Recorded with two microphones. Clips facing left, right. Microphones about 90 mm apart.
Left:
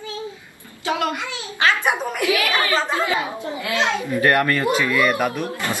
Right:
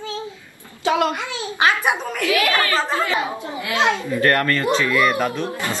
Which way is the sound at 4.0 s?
15° left (ahead or behind).